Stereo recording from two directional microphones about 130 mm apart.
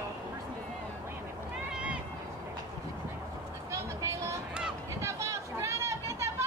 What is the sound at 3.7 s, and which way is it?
Vehicle, 20° right (ahead or behind).